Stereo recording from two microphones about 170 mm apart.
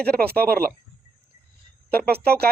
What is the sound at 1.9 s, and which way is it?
Speech, 65° right (ahead or behind).